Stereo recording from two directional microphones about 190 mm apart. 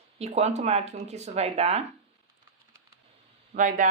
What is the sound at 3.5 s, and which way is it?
Speech, 45° right (ahead or behind).